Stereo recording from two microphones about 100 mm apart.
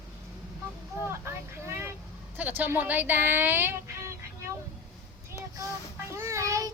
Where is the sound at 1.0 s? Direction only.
25° right (ahead or behind).